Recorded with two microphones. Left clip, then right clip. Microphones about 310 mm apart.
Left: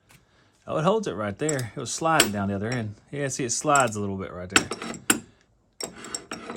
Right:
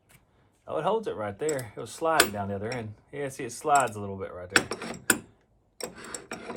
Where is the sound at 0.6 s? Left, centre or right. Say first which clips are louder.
Left 4 dB; left.